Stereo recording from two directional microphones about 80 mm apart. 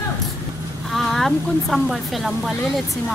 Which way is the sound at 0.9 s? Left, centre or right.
Centre.